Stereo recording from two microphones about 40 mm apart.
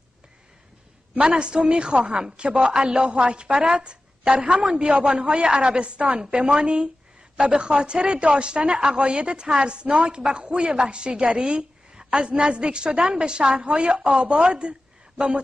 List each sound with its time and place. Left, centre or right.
1.1 s a woman's voice: right